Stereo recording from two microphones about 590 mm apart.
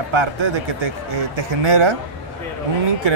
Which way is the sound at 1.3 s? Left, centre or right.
Right.